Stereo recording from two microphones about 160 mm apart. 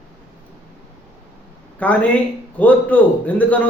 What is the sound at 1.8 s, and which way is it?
A man's voice, 10° left (ahead or behind).